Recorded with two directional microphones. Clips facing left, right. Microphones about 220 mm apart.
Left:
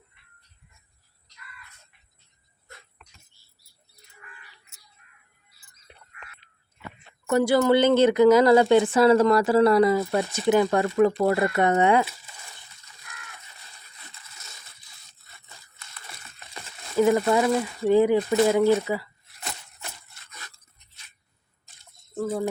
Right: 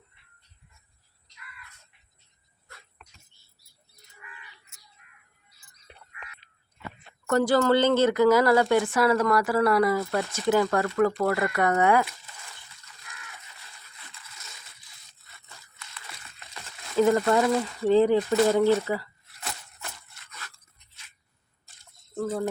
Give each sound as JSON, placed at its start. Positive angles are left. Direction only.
{"t": 7.3, "sound": "speech", "side_deg": 10}
{"t": 16.6, "sound": "a sound", "side_deg": 10}
{"t": 17.8, "sound": "speech", "side_deg": 10}
{"t": 22.1, "sound": "chicken", "side_deg": 5}